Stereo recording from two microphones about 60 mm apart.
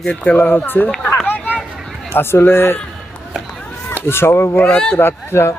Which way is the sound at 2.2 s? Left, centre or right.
Left.